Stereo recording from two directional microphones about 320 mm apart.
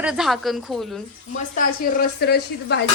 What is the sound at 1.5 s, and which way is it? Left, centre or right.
A woman's voice, left.